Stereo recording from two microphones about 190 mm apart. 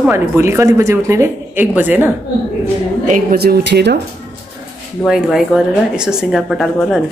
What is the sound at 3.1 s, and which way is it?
Speech, 50° right (ahead or behind).